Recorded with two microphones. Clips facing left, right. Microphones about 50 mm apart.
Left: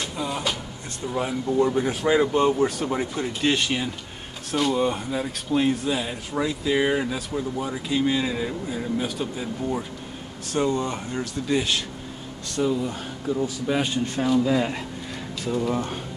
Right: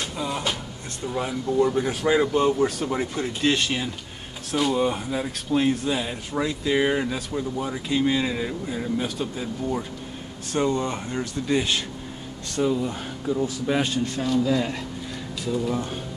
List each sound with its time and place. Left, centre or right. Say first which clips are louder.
0.0 s a sound: even; centre
1.0 s speech: left 1 dB; centre
2.3 s speech: even; left
3.2 s speech: right 1 dB; centre
13.8 s speech: even; left
14.2 s speech: left 2 dB; centre